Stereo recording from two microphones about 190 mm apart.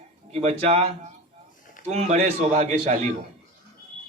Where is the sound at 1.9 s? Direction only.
35° right (ahead or behind).